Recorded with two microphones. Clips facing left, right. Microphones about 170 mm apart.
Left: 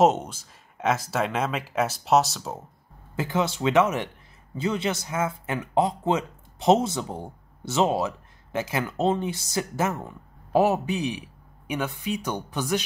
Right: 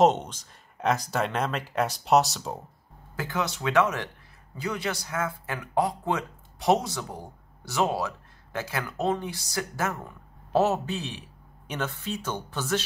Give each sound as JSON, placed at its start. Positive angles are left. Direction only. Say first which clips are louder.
{"t": 0.0, "sound": "speech", "louder": "left 1 dB", "side_deg": 5}
{"t": 3.2, "sound": "speech", "louder": "left 5 dB", "side_deg": 25}